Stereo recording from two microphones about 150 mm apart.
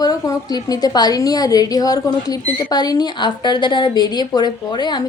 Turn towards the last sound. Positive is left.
turn(degrees=30)  # may be behind; listen again after turning